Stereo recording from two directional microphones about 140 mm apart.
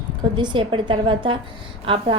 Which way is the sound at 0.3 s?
35° right (ahead or behind).